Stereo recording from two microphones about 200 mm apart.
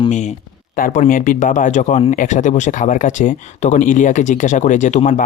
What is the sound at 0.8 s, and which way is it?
Speech, 40° left (ahead or behind).